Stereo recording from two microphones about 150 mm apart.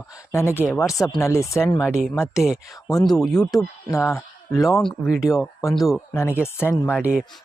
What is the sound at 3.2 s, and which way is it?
Speech, 5° left (ahead or behind).